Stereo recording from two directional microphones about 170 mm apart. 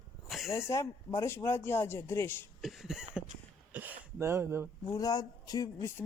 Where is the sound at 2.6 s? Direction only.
Centre (ahead or behind).